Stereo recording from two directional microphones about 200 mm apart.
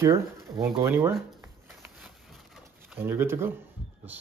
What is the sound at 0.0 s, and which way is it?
Speech, 15° right (ahead or behind).